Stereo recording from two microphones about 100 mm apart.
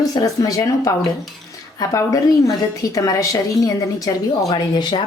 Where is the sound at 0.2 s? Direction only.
35° left (ahead or behind).